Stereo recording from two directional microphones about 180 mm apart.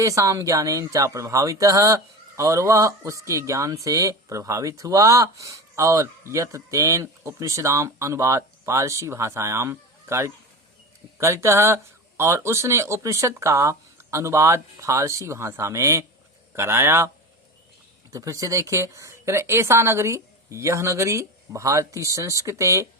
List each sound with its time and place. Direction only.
0.0 s speech: 15° right (ahead or behind)
18.1 s speech: 20° right (ahead or behind)